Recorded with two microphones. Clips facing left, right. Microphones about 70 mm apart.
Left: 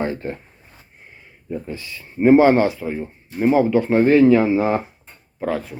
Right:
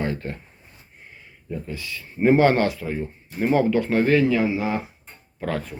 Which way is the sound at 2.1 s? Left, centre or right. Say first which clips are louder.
Left 5 dB; centre.